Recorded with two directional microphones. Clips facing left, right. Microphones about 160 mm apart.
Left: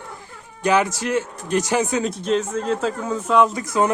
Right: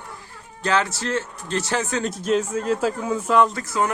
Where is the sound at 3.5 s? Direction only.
20° left (ahead or behind).